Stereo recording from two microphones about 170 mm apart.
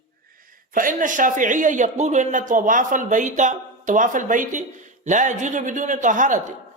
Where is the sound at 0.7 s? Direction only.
50° right (ahead or behind).